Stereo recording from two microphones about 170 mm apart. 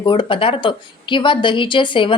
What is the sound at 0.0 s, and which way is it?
A woman's voice, 30° left (ahead or behind).